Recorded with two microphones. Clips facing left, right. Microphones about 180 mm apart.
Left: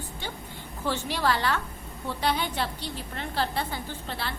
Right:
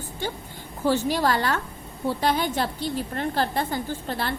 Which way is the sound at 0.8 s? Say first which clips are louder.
Right 5 dB; 40° right (ahead or behind).